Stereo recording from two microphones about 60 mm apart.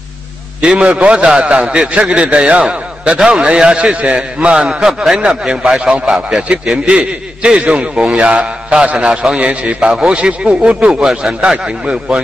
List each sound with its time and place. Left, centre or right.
0.6 s a man's voice: centre